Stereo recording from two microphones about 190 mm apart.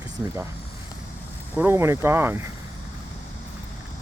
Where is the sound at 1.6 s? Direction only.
10° right (ahead or behind).